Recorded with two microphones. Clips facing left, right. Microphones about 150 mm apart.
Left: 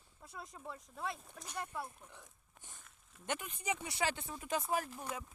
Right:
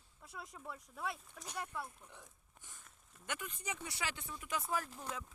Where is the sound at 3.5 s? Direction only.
15° left (ahead or behind).